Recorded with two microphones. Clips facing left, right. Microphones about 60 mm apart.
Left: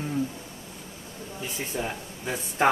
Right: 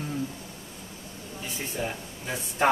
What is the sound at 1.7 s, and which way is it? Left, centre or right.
Speech, centre.